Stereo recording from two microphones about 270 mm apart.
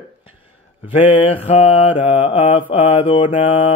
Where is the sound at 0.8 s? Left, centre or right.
Centre.